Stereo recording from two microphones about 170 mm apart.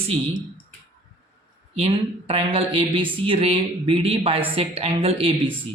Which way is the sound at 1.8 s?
35° right (ahead or behind).